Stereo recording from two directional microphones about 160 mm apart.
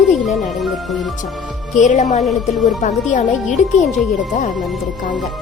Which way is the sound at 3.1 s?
50° left (ahead or behind).